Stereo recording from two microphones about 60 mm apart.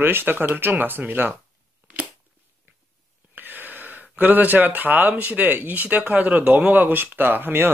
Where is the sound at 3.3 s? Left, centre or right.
Right.